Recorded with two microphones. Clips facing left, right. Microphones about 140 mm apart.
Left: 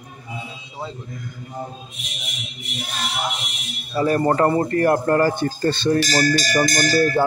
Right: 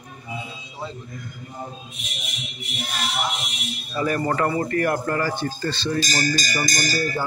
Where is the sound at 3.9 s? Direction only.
30° left (ahead or behind); by 7.2 s 60° left (ahead or behind).